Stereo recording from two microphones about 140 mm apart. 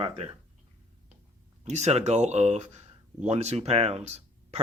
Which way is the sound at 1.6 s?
55° right (ahead or behind).